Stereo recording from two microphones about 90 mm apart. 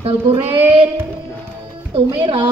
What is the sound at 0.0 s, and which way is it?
Child singing, 90° right.